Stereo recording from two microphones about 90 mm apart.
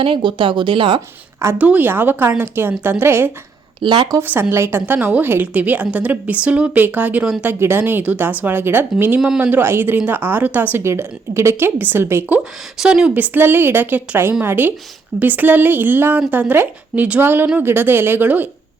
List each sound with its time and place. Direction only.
0.0 s speech: 70° right (ahead or behind)
1.5 s a woman's voice: 15° right (ahead or behind)
3.8 s a woman's voice: 55° right (ahead or behind)
4.2 s a woman's voice: 25° right (ahead or behind)
12.7 s a woman's voice: 5° right (ahead or behind)
13.1 s a woman's voice: 20° right (ahead or behind)